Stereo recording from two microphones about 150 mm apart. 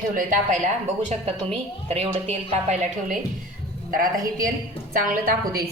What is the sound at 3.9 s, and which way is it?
A woman's voice, 65° right (ahead or behind).